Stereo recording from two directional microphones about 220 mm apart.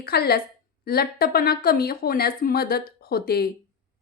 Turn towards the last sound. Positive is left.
turn(degrees=45)  # may be behind; listen again after turning